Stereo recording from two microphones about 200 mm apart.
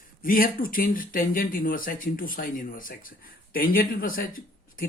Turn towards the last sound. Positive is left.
turn(degrees=45)  # may be behind; listen again after turning